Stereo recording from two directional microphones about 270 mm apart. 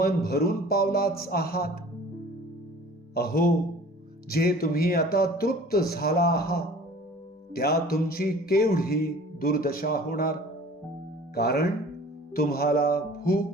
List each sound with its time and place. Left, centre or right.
0.0 s speech: left
3.2 s speech: left
11.3 s speech: left